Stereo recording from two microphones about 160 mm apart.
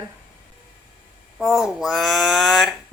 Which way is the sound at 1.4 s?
5° right (ahead or behind).